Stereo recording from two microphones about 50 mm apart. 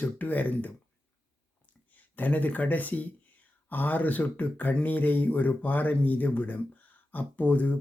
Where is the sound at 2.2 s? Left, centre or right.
Left.